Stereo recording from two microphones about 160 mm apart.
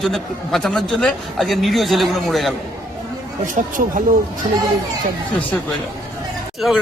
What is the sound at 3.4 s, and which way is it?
Speech, 55° right (ahead or behind).